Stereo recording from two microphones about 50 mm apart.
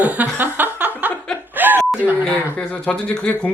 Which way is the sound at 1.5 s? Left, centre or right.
Right.